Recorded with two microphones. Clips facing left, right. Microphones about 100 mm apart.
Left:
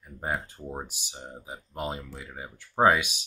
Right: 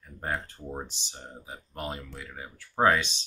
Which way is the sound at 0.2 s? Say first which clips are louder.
Left 1 dB; 15° left (ahead or behind).